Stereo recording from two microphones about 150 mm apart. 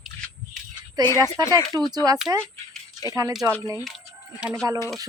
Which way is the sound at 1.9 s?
25° right (ahead or behind).